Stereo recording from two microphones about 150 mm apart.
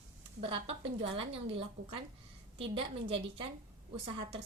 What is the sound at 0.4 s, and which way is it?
A woman's voice, 40° right (ahead or behind).